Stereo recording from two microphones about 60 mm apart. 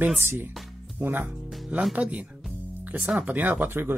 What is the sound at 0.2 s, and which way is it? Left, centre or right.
Speech, right.